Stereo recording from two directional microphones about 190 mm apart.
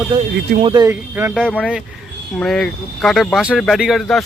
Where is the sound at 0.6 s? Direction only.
25° right (ahead or behind).